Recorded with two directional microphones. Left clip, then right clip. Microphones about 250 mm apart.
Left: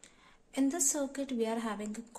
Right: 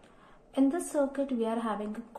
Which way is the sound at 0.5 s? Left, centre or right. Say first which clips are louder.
Right 4 dB; left.